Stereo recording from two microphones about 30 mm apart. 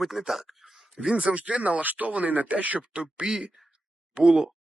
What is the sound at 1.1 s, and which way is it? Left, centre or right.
Speech, right.